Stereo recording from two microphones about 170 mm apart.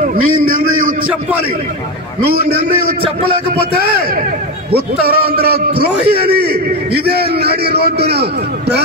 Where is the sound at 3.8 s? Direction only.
65° right (ahead or behind).